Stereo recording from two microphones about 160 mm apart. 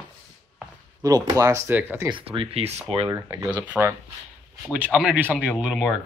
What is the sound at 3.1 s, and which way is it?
Speech, 10° right (ahead or behind).